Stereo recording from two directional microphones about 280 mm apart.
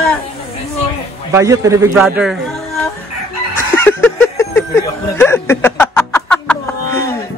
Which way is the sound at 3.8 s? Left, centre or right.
Centre.